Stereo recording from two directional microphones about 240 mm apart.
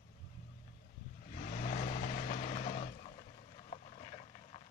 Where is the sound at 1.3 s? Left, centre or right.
Left.